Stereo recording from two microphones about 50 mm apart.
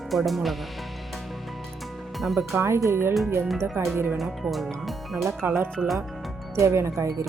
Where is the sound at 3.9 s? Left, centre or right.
Right.